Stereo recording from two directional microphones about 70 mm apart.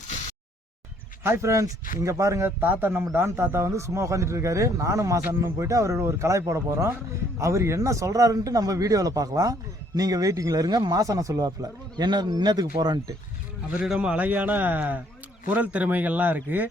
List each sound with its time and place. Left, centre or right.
1.2 s a man's voice: right
2.6 s a man's voice: right
13.8 s speech: centre